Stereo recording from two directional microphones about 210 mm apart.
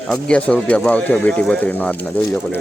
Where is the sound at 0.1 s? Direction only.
5° left (ahead or behind).